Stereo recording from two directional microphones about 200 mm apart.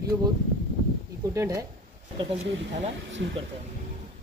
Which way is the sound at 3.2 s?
60° right (ahead or behind).